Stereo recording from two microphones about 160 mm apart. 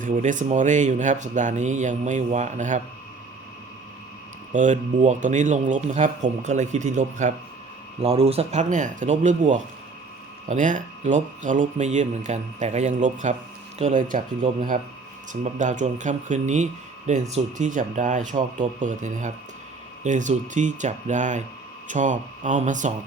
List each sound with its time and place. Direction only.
0.0 s speech: 55° right (ahead or behind)
4.5 s speech: 50° right (ahead or behind)
8.0 s speech: 40° right (ahead or behind)